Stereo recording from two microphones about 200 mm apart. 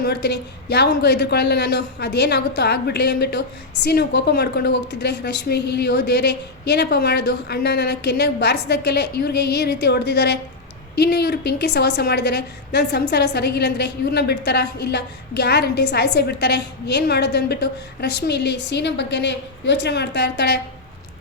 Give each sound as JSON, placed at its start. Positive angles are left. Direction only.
{"t": 0.0, "sound": "a woman's voice", "side_deg": 55}